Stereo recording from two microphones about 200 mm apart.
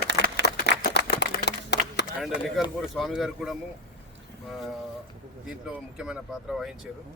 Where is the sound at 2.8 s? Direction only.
Centre (ahead or behind).